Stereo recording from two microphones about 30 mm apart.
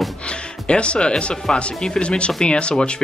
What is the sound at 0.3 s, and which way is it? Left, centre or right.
Speech, left.